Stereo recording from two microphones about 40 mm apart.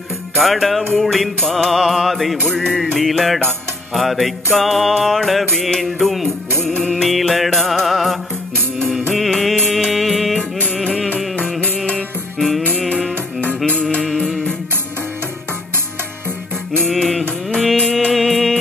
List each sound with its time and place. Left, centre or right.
0.4 s music: centre
10.6 s music: left
12.4 s music: centre
14.1 s music: centre
16.9 s music: centre